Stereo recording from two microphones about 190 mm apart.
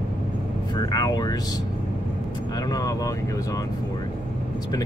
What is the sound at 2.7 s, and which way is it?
Speech, 20° left (ahead or behind).